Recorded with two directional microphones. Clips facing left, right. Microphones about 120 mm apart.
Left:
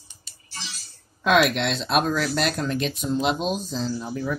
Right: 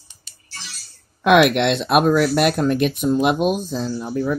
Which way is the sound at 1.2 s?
65° right (ahead or behind).